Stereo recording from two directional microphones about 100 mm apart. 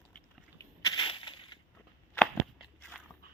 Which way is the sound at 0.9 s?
55° left (ahead or behind).